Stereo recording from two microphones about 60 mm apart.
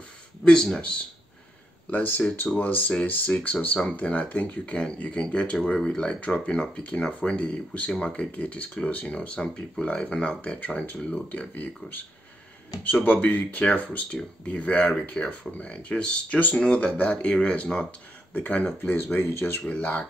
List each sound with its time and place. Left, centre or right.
0.5 s speech: centre
1.9 s speech: left
19.2 s speech: left
19.7 s speech: left